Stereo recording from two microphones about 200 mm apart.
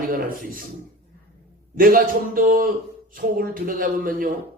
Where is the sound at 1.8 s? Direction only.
45° right (ahead or behind).